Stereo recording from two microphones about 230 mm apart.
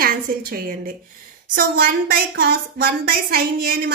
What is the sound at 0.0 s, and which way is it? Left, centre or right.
A woman's voice, right.